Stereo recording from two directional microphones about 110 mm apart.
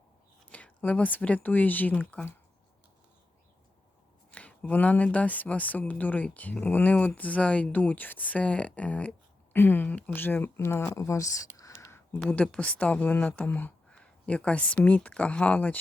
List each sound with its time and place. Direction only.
0.5 s a woman's voice: 15° left (ahead or behind)
4.3 s a woman's voice: 15° left (ahead or behind); by 11.7 s 30° left (ahead or behind)
11.8 s a sound: 25° left (ahead or behind)
12.3 s a woman's voice: 10° left (ahead or behind)